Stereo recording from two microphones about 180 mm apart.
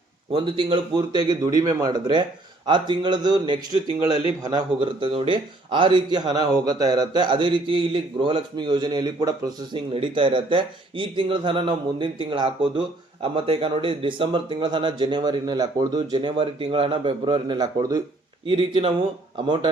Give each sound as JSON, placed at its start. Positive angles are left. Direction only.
{"t": 0.3, "sound": "speech", "side_deg": -30}
{"t": 4.1, "sound": "speech", "side_deg": 30}
{"t": 4.4, "sound": "speech", "side_deg": -25}
{"t": 18.4, "sound": "speech", "side_deg": -30}